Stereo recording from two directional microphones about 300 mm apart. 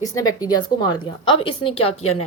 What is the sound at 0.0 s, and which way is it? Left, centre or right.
A woman's voice, centre.